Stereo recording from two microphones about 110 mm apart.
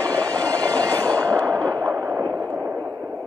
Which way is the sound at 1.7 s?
30° right (ahead or behind).